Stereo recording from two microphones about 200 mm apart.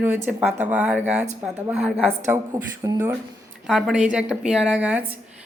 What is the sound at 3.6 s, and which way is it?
Speech, centre (ahead or behind).